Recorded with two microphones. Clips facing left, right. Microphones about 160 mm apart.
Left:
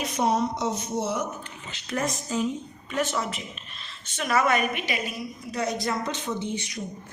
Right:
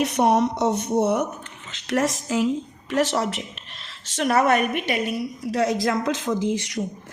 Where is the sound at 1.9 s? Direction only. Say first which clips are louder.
Right 6 dB; 90° right.